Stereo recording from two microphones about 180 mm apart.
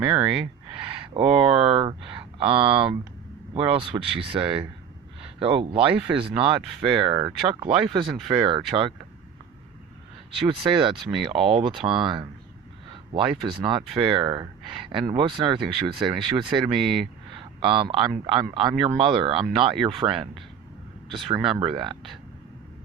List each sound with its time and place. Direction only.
0.0 s speech: 30° right (ahead or behind)
10.4 s speech: 30° right (ahead or behind)
21.3 s speech: 30° right (ahead or behind)